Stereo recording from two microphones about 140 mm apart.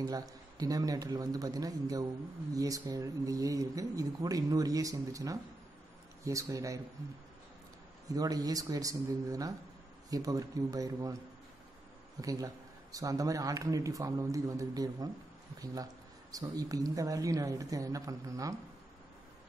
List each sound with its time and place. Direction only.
0.0 s speech: 25° right (ahead or behind)
8.1 s speech: 25° right (ahead or behind)
12.2 s speech: 25° right (ahead or behind)